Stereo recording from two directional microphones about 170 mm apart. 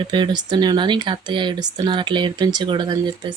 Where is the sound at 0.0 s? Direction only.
25° right (ahead or behind).